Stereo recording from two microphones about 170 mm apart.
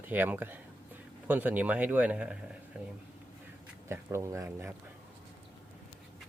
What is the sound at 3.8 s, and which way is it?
Speech, 15° right (ahead or behind).